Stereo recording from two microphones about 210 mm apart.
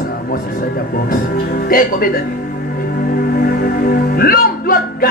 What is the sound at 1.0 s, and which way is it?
A woman's voice, 40° left (ahead or behind).